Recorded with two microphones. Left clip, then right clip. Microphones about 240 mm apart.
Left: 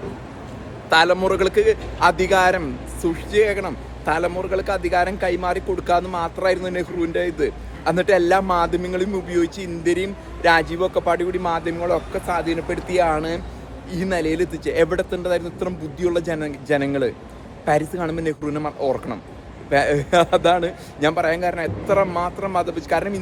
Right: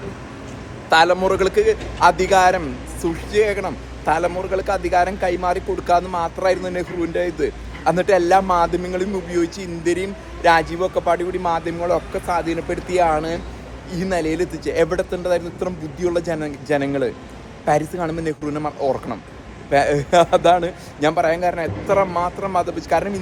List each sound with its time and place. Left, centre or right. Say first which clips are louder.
0.9 s a man's voice: right 1 dB; centre